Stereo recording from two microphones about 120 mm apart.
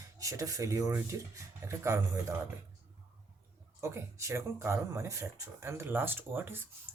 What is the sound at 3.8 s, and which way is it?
Speech, 25° right (ahead or behind).